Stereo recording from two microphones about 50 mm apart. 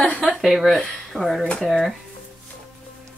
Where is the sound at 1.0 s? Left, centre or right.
Centre.